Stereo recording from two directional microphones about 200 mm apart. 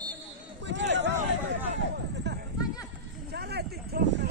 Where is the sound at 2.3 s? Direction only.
60° right (ahead or behind).